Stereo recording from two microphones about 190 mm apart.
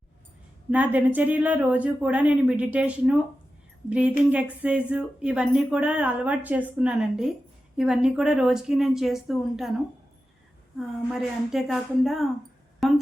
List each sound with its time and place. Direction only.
0.7 s speech: 10° right (ahead or behind)
10.8 s a woman's voice: centre (ahead or behind)